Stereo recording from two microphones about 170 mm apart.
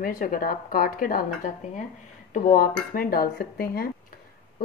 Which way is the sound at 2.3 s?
55° left (ahead or behind).